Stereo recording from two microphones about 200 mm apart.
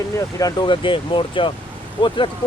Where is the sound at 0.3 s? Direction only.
20° left (ahead or behind).